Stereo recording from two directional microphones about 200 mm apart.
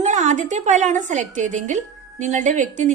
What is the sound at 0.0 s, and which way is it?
A woman's voice, 35° right (ahead or behind).